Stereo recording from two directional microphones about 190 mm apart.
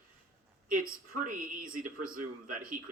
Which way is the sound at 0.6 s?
45° right (ahead or behind).